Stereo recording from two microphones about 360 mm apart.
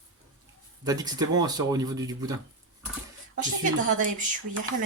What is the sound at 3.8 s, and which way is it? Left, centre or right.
Speech, right.